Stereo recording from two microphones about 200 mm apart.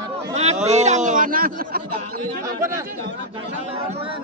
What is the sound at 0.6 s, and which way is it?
A man's voice, 35° right (ahead or behind).